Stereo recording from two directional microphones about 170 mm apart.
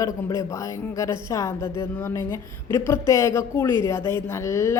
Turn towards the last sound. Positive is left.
turn(degrees=15)  # may be behind; listen again after turning